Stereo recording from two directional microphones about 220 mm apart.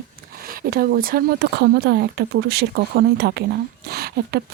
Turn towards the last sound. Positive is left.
turn(degrees=-45)  # may be behind; listen again after turning